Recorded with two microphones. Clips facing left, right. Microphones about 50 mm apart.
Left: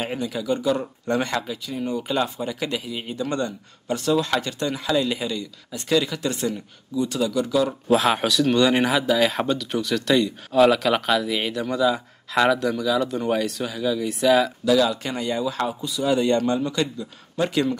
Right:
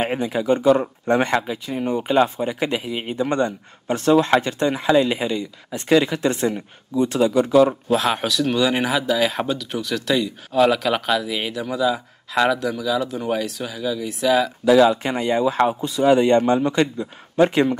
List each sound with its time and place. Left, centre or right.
0.0 s speech: right
7.9 s speech: centre
14.6 s speech: right